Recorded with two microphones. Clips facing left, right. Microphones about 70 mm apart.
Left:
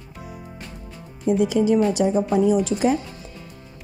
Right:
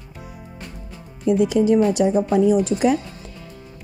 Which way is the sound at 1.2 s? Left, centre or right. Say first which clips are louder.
Right 2 dB; right.